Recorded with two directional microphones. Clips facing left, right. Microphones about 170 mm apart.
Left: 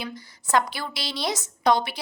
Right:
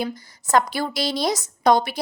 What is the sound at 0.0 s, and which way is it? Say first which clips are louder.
A woman's voice: right 7 dB; 45° right (ahead or behind).